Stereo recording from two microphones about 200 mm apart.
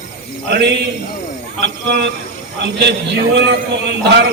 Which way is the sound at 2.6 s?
60° right (ahead or behind).